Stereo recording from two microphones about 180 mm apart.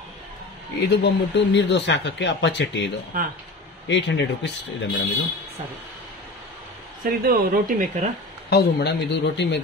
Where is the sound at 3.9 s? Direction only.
75° left (ahead or behind).